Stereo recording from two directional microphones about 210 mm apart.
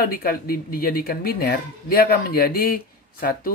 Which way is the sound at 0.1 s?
45° left (ahead or behind).